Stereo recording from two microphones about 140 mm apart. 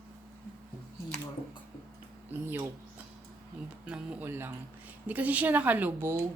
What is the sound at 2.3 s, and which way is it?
Speech, 15° right (ahead or behind).